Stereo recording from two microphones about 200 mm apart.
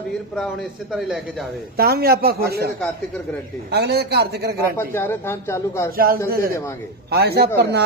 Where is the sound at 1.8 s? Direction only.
50° right (ahead or behind).